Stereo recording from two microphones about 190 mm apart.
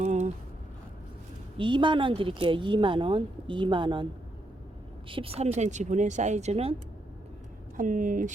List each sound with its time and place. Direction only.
0.0 s a sound: 40° right (ahead or behind)
1.5 s speech: 25° right (ahead or behind)
7.8 s speech: 45° right (ahead or behind)